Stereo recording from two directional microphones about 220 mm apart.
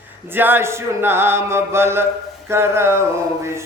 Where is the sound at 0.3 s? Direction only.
10° right (ahead or behind).